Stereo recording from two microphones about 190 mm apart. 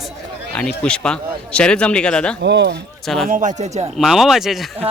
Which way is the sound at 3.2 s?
45° right (ahead or behind).